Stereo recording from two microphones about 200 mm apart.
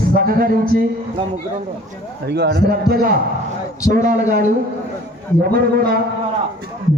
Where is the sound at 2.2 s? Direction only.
55° right (ahead or behind).